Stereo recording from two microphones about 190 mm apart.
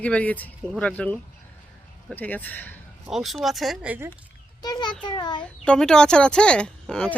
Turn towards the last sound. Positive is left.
turn(degrees=5)  # may be behind; listen again after turning